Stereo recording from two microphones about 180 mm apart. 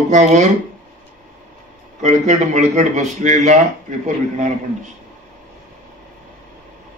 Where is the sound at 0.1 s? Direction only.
40° right (ahead or behind).